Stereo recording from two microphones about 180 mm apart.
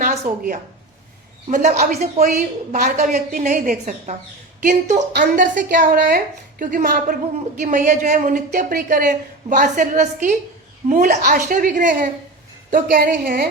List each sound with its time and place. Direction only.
0.0 s a sound: 40° right (ahead or behind)
1.5 s a woman's voice: 40° right (ahead or behind)
2.2 s a woman's voice: 55° right (ahead or behind)
5.1 s a woman's voice: 55° right (ahead or behind)